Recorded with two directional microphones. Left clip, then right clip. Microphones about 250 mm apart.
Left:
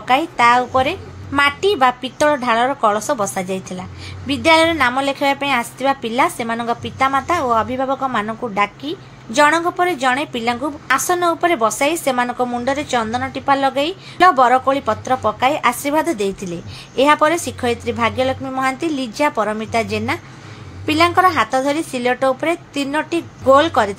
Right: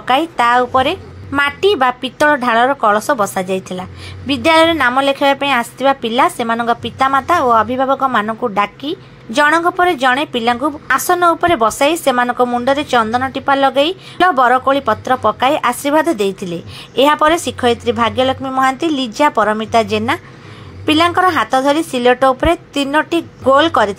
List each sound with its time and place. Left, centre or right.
0.0 s a woman's voice: centre